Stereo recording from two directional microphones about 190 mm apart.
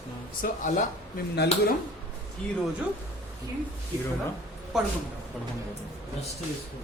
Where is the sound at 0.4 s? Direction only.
40° left (ahead or behind).